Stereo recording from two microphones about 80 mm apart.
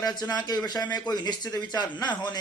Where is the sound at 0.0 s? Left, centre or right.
Left.